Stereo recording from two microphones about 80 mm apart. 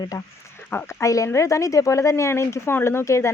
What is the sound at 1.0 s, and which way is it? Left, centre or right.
Speech, left.